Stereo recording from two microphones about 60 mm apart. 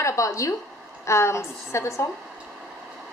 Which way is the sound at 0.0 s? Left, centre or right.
Left.